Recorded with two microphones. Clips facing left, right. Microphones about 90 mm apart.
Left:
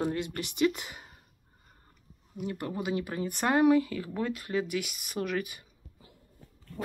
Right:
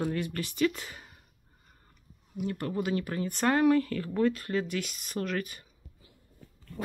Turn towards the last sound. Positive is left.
turn(degrees=15)  # may be behind; listen again after turning